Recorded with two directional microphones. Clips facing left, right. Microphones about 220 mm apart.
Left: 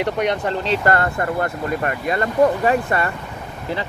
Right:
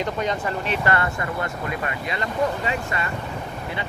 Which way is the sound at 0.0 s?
70° left (ahead or behind).